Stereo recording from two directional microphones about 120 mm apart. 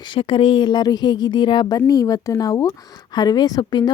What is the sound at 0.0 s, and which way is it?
Speech, 45° left (ahead or behind).